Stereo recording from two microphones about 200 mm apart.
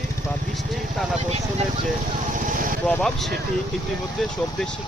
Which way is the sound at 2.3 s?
40° right (ahead or behind).